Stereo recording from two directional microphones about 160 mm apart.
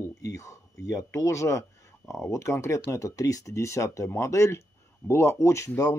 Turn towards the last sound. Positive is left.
turn(degrees=20)  # may be behind; listen again after turning